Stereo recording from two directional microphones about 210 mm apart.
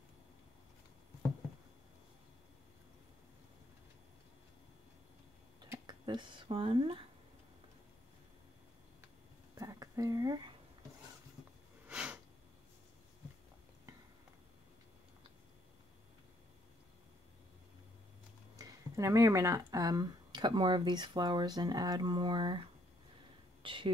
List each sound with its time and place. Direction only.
5.6 s speech: 20° right (ahead or behind)
9.6 s a sound: 15° right (ahead or behind)
11.9 s sniff: 5° right (ahead or behind)
18.6 s a woman's voice: 15° right (ahead or behind)